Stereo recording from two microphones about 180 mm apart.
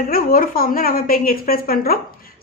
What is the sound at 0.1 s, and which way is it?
A woman's voice, 55° left (ahead or behind).